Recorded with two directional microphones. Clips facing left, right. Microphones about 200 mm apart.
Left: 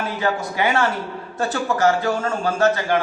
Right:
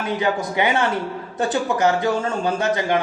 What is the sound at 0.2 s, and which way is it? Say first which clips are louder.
A man's voice: even; 20° right (ahead or behind).